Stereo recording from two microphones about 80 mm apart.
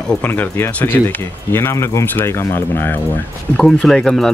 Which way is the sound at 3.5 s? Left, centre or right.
Centre.